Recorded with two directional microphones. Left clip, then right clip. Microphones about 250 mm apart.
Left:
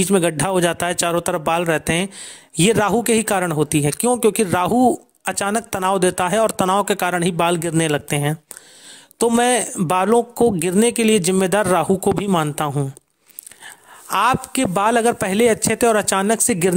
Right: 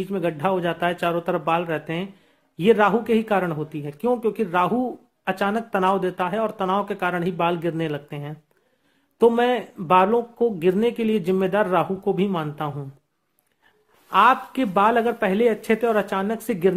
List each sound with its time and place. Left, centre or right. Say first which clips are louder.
0.0 s speech: left 6 dB; left